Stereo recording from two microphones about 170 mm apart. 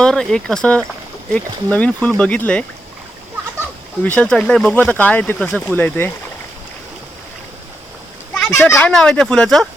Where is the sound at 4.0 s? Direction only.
5° left (ahead or behind).